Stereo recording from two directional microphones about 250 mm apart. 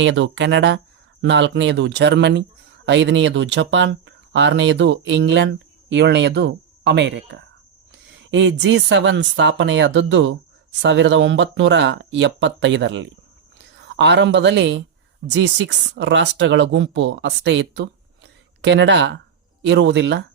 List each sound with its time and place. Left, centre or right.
0.0 s speech: right